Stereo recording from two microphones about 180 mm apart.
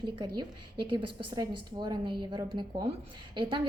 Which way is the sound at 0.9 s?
25° right (ahead or behind).